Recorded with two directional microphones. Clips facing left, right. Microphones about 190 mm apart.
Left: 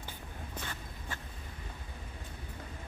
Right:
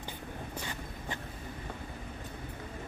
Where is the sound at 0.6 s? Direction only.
15° right (ahead or behind).